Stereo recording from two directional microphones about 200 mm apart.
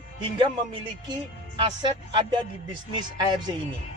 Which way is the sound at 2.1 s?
20° right (ahead or behind).